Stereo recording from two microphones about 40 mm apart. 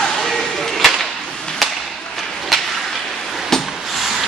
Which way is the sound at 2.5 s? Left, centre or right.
Centre.